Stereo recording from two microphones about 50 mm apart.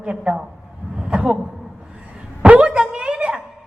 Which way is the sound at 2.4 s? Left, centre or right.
Right.